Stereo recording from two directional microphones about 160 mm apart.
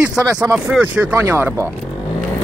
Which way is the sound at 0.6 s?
10° right (ahead or behind).